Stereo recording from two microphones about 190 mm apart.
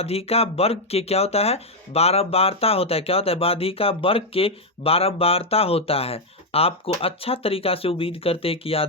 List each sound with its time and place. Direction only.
0.0 s speech: 30° left (ahead or behind)